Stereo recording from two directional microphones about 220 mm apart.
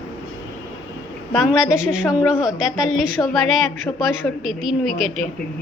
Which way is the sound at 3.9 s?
15° left (ahead or behind).